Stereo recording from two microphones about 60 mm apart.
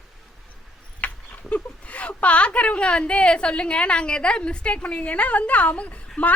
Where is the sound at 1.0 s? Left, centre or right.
Left.